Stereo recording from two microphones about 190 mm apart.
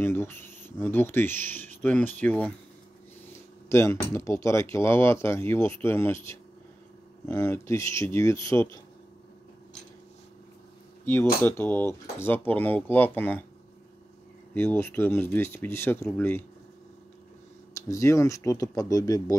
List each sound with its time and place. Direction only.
0.0 s speech: 10° left (ahead or behind)
11.4 s speech: 10° left (ahead or behind)
14.5 s speech: 10° left (ahead or behind)
17.7 s speech: 15° left (ahead or behind)